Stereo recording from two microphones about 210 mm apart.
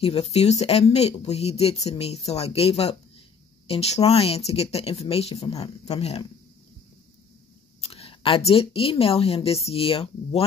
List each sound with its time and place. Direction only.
0.0 s speech: 30° left (ahead or behind)
7.8 s speech: 30° left (ahead or behind)